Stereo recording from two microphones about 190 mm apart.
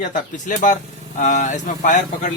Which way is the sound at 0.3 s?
45° left (ahead or behind).